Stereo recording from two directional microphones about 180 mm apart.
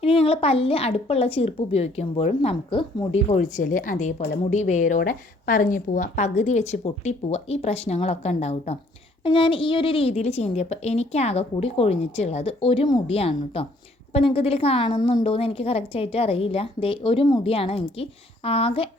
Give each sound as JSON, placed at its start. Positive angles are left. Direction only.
{"t": 0.0, "sound": "a woman's voice", "side_deg": 30}